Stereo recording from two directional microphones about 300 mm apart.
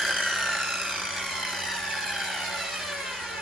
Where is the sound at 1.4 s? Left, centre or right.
Centre.